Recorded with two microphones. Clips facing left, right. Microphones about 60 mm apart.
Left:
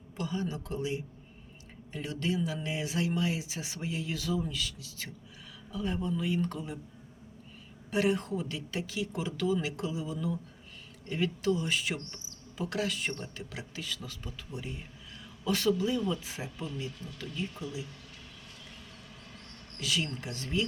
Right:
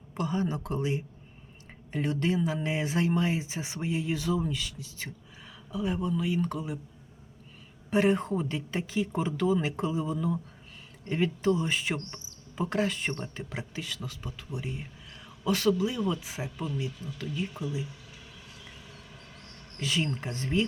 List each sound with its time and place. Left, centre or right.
0.2 s speech: right
5.7 s speech: centre
7.9 s a woman's voice: right
13.8 s speech: centre
19.8 s speech: right